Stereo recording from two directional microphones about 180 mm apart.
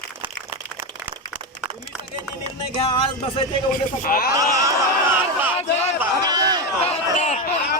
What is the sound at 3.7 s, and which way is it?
Speech, 50° left (ahead or behind).